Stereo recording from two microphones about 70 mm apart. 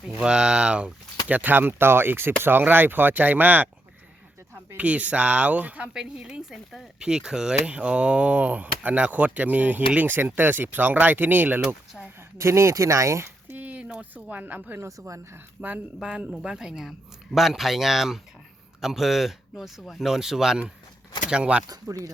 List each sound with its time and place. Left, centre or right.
0.2 s speech: centre
1.3 s speech: right
4.8 s speech: centre
12.0 s speech: centre
12.4 s speech: right
13.6 s speech: centre
14.8 s speech: right
15.6 s speech: centre
21.7 s speech: right